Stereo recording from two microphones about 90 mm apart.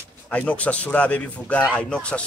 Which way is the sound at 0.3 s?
15° left (ahead or behind).